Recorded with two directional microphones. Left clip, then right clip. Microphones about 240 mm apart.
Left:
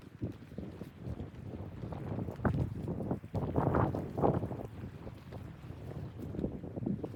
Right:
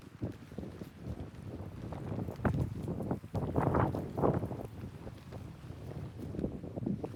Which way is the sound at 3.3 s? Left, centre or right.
Centre.